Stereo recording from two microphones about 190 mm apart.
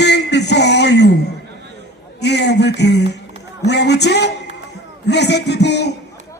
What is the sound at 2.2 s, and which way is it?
Speech, 65° left (ahead or behind).